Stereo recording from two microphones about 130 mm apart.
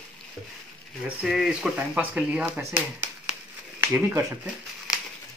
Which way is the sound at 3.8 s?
10° right (ahead or behind).